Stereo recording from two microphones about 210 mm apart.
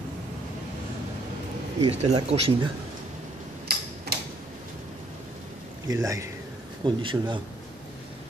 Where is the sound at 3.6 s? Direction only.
50° right (ahead or behind).